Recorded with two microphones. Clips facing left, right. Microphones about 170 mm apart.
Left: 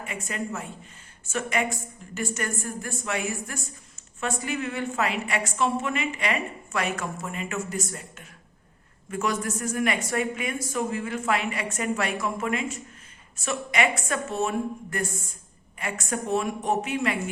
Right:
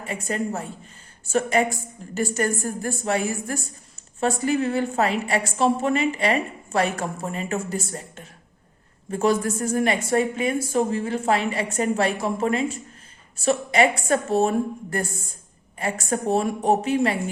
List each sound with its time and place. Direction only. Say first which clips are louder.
0.0 s a woman's voice: right 6 dB; 35° right (ahead or behind)